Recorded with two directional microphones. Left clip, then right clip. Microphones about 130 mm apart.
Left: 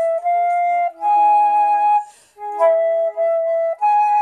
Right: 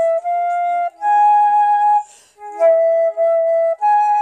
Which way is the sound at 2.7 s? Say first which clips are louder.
Right 3 dB; 40° left (ahead or behind).